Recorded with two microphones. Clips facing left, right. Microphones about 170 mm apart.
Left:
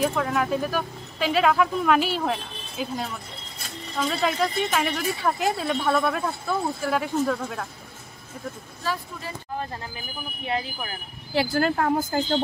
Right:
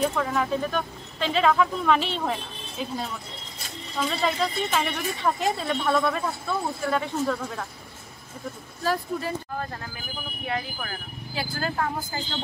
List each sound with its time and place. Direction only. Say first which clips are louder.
0.0 s a woman's voice: left 1 dB; 5° left (ahead or behind)
4.1 s a woman's voice: left 2 dB; 5° left (ahead or behind)
8.8 s speech: right 4 dB; 45° right (ahead or behind)
10.4 s speech: left 2 dB; 25° left (ahead or behind)
11.3 s speech: left 8 dB; 75° left (ahead or behind)
11.7 s a woman's voice: left 6 dB; 55° left (ahead or behind)